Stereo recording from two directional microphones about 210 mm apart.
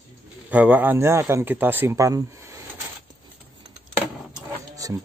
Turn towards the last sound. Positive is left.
turn(degrees=-15)  # may be behind; listen again after turning